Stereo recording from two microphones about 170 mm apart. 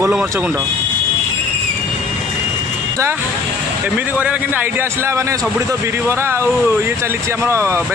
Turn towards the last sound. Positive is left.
turn(degrees=-15)  # may be behind; listen again after turning